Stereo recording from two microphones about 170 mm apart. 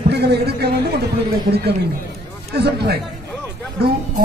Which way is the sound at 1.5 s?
60° right (ahead or behind).